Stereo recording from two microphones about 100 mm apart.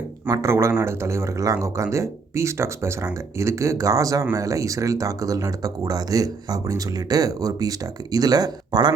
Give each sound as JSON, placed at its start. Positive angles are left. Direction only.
{"t": 0.3, "sound": "speech", "side_deg": -25}